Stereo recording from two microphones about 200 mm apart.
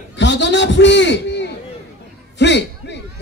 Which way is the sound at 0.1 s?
60° left (ahead or behind).